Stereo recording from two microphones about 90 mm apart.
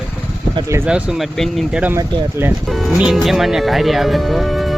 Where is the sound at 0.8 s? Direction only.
10° right (ahead or behind).